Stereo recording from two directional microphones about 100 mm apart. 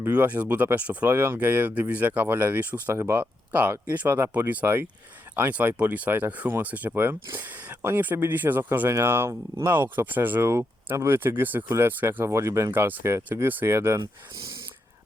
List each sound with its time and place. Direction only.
0.1 s speech: 15° right (ahead or behind)
2.9 s speech: 25° right (ahead or behind)
3.2 s speech: 15° right (ahead or behind)